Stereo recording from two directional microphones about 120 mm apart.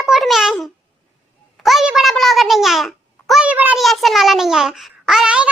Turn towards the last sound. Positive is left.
turn(degrees=-10)  # may be behind; listen again after turning